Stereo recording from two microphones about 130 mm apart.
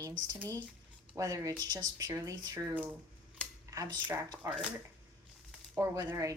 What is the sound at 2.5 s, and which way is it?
Speech, 15° right (ahead or behind).